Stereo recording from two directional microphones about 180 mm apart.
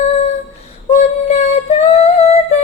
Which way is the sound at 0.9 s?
35° left (ahead or behind).